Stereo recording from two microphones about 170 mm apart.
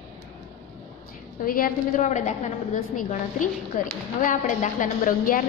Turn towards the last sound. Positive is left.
turn(degrees=55)  # may be behind; listen again after turning